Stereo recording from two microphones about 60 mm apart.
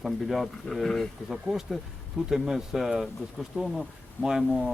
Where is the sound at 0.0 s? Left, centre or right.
Centre.